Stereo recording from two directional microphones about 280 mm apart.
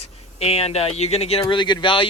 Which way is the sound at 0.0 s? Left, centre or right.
Left.